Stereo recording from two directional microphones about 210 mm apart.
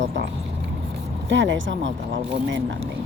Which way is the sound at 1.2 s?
60° right (ahead or behind).